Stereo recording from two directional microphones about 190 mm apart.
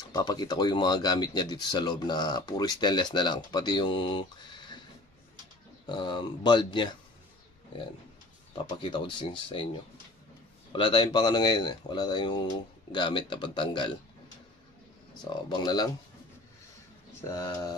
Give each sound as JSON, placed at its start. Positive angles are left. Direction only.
{"t": 0.1, "sound": "speech", "side_deg": 20}
{"t": 5.9, "sound": "speech", "side_deg": 25}
{"t": 8.6, "sound": "speech", "side_deg": 25}
{"t": 10.7, "sound": "speech", "side_deg": 25}
{"t": 15.5, "sound": "speech", "side_deg": 20}
{"t": 17.3, "sound": "speech", "side_deg": 20}